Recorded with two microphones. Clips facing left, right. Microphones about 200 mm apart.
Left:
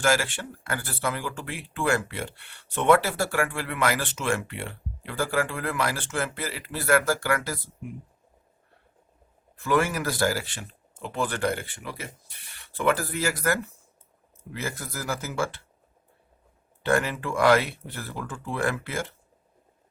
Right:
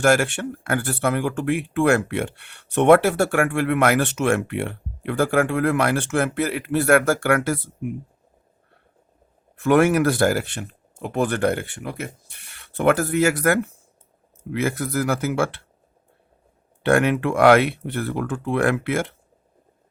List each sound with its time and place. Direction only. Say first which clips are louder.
0.0 s speech: right 6 dB; 60° right (ahead or behind)
9.6 s speech: right 8 dB; 65° right (ahead or behind)
16.8 s speech: right 7 dB; 65° right (ahead or behind)